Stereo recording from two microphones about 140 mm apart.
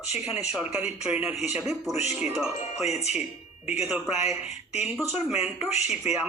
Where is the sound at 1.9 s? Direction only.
50° left (ahead or behind).